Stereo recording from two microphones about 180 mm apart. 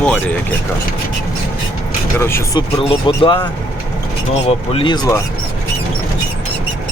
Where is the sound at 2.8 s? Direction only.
30° left (ahead or behind).